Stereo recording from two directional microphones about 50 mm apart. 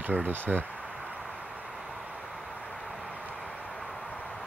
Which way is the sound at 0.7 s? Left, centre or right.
Centre.